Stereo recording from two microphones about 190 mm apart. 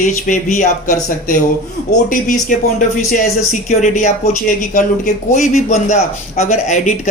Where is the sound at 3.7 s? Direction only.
40° left (ahead or behind).